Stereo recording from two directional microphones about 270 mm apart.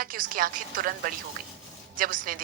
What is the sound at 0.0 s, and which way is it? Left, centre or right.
A woman's voice, right.